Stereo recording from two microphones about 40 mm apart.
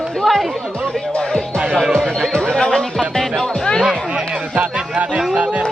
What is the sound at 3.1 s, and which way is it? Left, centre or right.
Music, centre.